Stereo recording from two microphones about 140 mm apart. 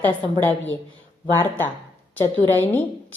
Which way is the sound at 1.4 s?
15° left (ahead or behind).